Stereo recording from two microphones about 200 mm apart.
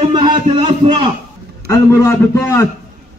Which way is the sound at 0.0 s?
20° right (ahead or behind).